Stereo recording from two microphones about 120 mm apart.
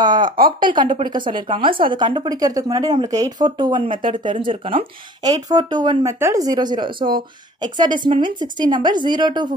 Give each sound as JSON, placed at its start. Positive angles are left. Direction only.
{"t": 0.0, "sound": "a woman's voice", "side_deg": -40}
{"t": 6.1, "sound": "speech", "side_deg": -20}
{"t": 6.4, "sound": "a woman's voice", "side_deg": -35}